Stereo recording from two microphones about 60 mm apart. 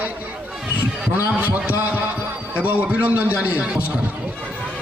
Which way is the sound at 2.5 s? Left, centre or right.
Right.